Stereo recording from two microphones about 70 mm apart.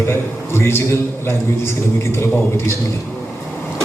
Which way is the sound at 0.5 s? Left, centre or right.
Left.